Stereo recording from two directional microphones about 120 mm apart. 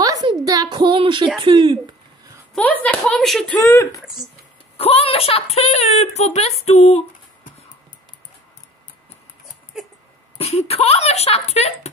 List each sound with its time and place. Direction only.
0.0 s a sound: 30° right (ahead or behind)
1.4 s speech: 45° right (ahead or behind)
2.5 s speech: 10° left (ahead or behind)
3.6 s speech: 25° left (ahead or behind)
4.7 s a woman's voice: 55° left (ahead or behind)
9.8 s a sound: 5° right (ahead or behind)
10.3 s a woman's voice: 60° left (ahead or behind)